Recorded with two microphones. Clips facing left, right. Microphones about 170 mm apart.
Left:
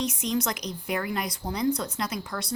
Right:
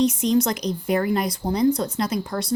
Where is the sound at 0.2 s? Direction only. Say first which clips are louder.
Right 8 dB; 30° right (ahead or behind).